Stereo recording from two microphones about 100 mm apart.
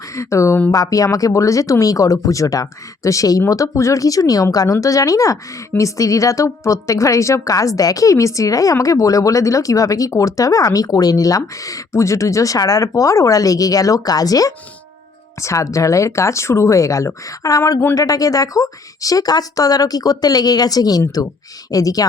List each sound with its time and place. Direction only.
0.2 s speech: 30° left (ahead or behind)